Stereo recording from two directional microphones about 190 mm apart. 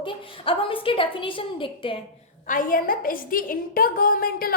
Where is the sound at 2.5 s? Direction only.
45° left (ahead or behind).